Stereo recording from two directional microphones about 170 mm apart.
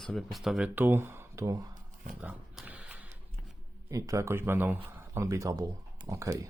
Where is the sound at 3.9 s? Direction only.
20° right (ahead or behind).